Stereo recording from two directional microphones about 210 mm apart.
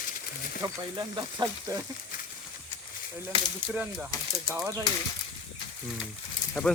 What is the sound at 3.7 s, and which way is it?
Speech, 5° right (ahead or behind).